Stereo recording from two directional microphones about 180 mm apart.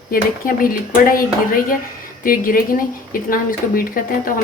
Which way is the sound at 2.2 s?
50° left (ahead or behind).